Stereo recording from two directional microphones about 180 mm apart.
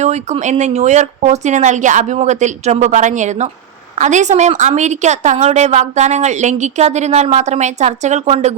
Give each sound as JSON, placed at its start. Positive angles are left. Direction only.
{"t": 0.0, "sound": "a woman's voice", "side_deg": -40}